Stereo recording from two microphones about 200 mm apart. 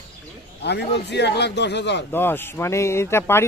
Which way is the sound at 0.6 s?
55° left (ahead or behind).